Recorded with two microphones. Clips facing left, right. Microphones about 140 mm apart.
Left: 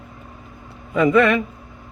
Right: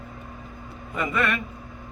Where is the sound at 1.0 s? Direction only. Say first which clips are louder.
Left 11 dB; 90° left.